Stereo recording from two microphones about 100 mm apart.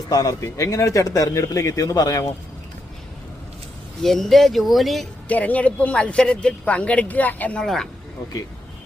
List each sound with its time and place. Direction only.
0.1 s a man's voice: 35° left (ahead or behind)
4.0 s speech: 5° left (ahead or behind)
5.3 s speech: 15° left (ahead or behind)
7.6 s speech: 5° left (ahead or behind)